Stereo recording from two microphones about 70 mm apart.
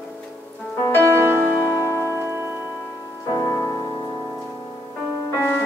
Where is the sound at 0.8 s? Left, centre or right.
Left.